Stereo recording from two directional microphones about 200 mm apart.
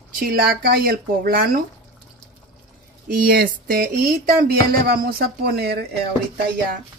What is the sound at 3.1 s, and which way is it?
Speech, 45° right (ahead or behind).